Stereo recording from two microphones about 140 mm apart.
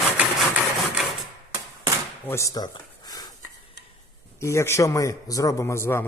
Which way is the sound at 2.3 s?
20° left (ahead or behind).